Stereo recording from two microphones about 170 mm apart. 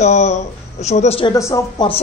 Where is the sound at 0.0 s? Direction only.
40° left (ahead or behind).